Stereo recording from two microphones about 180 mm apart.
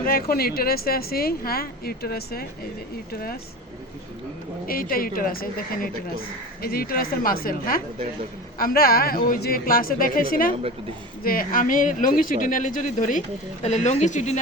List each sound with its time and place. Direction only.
0.0 s a woman's voice: 55° left (ahead or behind)
4.6 s a woman's voice: 50° left (ahead or behind)